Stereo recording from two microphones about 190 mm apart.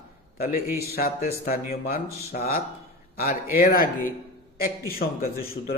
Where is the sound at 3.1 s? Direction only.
55° left (ahead or behind).